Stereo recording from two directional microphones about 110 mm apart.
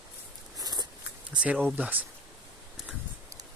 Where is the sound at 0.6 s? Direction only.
40° right (ahead or behind).